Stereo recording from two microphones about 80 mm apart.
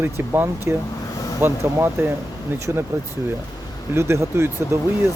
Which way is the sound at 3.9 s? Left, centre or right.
Right.